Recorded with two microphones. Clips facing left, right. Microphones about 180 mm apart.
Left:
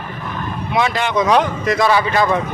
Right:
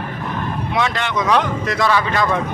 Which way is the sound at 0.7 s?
10° left (ahead or behind).